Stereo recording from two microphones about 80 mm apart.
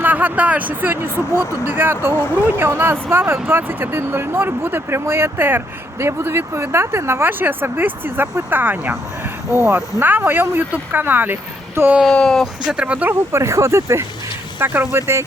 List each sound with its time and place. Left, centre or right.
0.0 s speech: right
2.2 s speech: left
2.5 s speech: right
9.5 s speech: right
12.0 s speech: centre
12.6 s speech: centre
13.3 s speech: right
14.6 s speech: right